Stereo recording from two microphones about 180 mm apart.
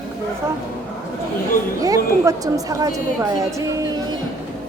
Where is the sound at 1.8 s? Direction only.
20° right (ahead or behind).